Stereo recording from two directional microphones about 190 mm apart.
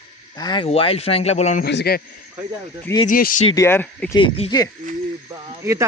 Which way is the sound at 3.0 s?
45° left (ahead or behind).